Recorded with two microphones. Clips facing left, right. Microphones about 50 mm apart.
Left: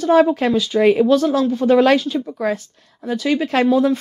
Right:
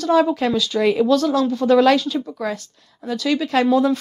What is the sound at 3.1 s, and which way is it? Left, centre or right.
Speech, left.